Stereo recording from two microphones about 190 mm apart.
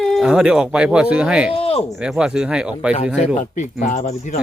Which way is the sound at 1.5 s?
30° left (ahead or behind).